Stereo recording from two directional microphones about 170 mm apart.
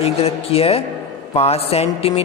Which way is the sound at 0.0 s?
35° left (ahead or behind).